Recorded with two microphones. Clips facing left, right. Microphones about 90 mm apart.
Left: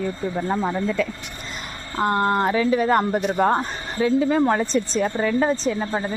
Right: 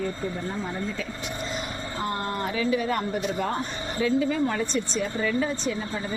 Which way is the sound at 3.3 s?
45° left (ahead or behind).